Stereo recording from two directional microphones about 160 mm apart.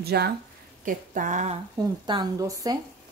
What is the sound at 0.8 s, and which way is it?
Speech, 55° right (ahead or behind).